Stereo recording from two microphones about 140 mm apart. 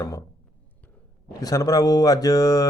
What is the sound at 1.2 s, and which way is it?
Speech, 25° left (ahead or behind).